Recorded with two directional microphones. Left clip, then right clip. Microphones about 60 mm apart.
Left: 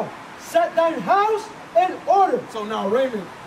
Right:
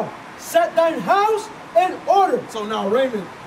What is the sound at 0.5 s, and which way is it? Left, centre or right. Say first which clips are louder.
A man's voice: right 2 dB; centre.